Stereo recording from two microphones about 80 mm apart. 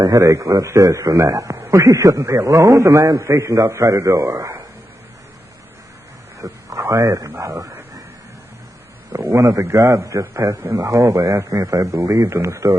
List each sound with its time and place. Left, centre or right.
0.0 s speech: right
6.4 s speech: right
9.1 s a man's voice: right